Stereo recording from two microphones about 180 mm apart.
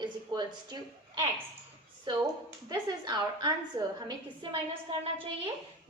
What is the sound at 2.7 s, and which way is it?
A woman's voice, 25° right (ahead or behind).